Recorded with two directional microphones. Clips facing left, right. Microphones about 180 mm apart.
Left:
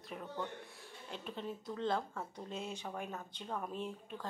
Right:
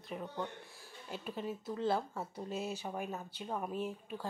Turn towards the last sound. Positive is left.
turn(degrees=-5)  # may be behind; listen again after turning